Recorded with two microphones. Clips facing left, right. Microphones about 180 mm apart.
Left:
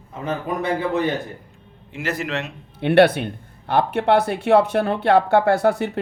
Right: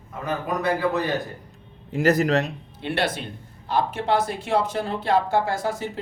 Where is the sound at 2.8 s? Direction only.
60° left (ahead or behind).